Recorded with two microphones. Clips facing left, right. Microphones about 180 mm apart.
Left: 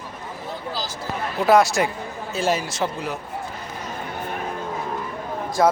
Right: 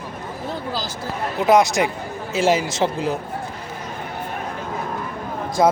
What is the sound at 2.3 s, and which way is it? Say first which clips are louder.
Speech: right 4 dB; 90° right.